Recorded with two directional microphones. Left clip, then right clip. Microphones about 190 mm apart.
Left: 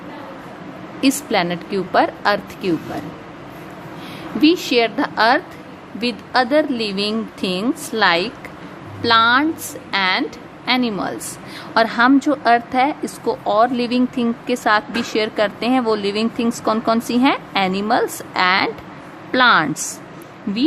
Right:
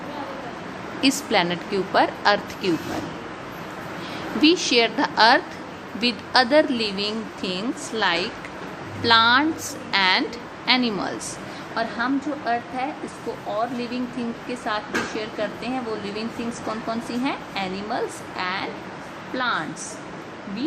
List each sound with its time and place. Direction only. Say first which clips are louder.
1.0 s a woman's voice: left 3 dB; 25° left (ahead or behind)
4.4 s a woman's voice: left 3 dB; 25° left (ahead or behind)